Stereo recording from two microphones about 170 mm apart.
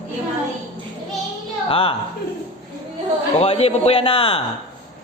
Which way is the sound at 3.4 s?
35° left (ahead or behind).